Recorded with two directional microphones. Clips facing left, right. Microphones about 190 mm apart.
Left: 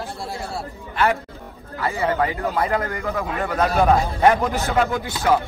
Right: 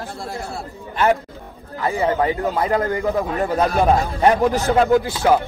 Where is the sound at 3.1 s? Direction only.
30° right (ahead or behind).